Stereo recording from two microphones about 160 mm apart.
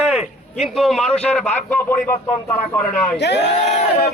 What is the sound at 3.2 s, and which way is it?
Speech, 90° left.